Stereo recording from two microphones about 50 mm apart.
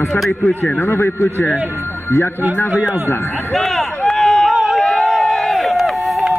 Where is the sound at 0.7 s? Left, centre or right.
Left.